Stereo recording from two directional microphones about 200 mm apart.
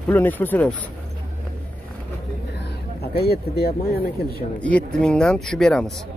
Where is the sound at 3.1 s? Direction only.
50° left (ahead or behind).